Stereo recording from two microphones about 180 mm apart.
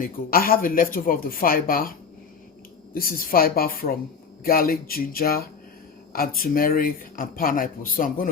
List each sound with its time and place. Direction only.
0.0 s a woman's voice: 55° left (ahead or behind)